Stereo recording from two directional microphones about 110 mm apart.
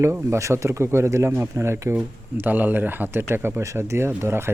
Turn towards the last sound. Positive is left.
turn(degrees=-25)  # may be behind; listen again after turning